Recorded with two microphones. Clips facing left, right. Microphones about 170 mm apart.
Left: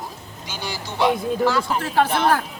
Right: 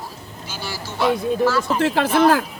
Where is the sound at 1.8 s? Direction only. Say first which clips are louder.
Right 3 dB; 90° right.